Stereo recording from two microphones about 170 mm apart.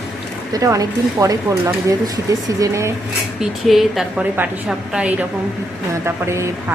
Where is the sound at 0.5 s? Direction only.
20° right (ahead or behind).